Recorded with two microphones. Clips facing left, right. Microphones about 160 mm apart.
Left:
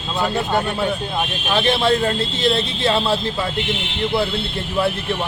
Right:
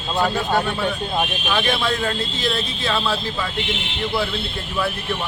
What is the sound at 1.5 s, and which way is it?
A man's voice, 25° left (ahead or behind).